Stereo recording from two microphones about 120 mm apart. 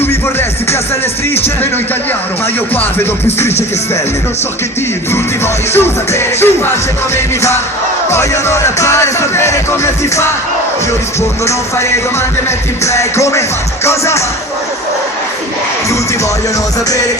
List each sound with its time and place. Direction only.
0.0 s music: 20° left (ahead or behind)
5.7 s music: 20° left (ahead or behind)
8.1 s music: 25° left (ahead or behind)
11.4 s music: 25° left (ahead or behind)